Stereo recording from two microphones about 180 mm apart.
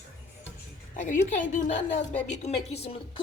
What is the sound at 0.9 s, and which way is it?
A woman's voice, 45° left (ahead or behind).